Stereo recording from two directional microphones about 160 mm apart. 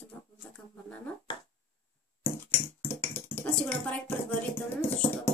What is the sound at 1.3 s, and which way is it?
Speech, 25° left (ahead or behind).